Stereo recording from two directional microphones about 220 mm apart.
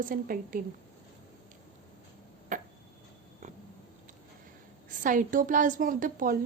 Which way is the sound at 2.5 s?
35° right (ahead or behind).